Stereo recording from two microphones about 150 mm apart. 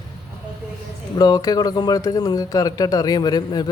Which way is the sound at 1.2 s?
25° left (ahead or behind).